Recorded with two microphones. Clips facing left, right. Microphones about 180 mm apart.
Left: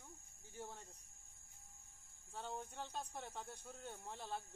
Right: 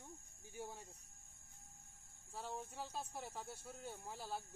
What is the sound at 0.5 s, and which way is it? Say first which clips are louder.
Speech: right 2 dB; 10° right (ahead or behind).